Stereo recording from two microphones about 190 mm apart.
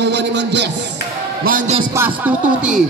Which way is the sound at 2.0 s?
10° right (ahead or behind).